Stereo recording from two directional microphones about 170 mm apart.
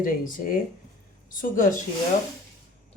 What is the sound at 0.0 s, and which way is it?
A man's voice, 55° left (ahead or behind).